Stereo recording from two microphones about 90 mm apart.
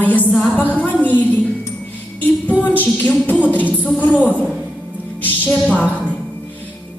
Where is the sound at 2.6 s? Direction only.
20° left (ahead or behind).